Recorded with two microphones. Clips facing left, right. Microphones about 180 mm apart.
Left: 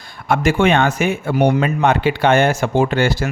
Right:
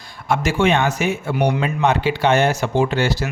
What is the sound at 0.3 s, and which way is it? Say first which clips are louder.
Speech: left 3 dB; 55° left (ahead or behind).